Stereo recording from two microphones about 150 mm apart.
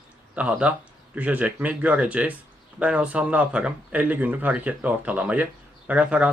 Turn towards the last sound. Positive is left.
turn(degrees=-10)  # may be behind; listen again after turning